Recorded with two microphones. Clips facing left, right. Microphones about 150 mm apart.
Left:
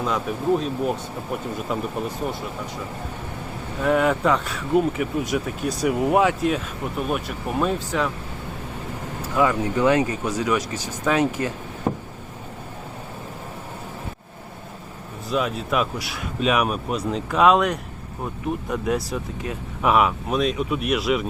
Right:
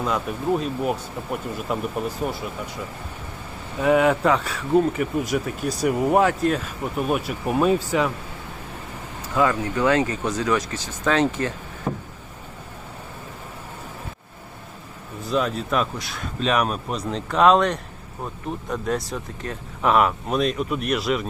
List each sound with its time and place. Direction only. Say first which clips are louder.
0.0 s speech: left 1 dB; centre (ahead or behind)
3.8 s speech: right 2 dB; 5° right (ahead or behind)
9.3 s speech: left 1 dB; 15° left (ahead or behind)
15.3 s speech: right 1 dB; 5° left (ahead or behind)